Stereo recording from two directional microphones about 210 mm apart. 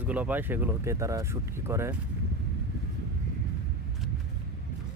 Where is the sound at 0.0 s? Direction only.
10° right (ahead or behind).